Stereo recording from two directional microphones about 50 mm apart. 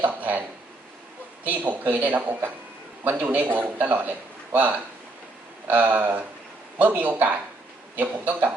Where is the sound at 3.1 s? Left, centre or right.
Right.